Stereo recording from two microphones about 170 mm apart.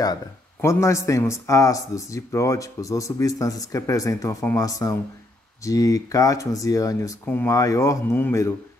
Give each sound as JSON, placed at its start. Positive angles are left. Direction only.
{"t": 0.0, "sound": "speech", "side_deg": 20}